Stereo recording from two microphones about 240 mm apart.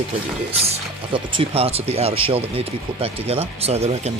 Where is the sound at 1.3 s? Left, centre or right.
Right.